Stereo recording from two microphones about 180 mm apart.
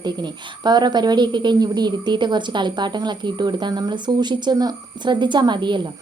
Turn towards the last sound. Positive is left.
turn(degrees=-25)  # may be behind; listen again after turning